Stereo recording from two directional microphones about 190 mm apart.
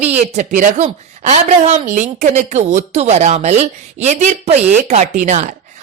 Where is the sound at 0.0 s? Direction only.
35° right (ahead or behind).